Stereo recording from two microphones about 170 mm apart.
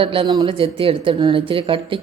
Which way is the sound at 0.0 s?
30° right (ahead or behind).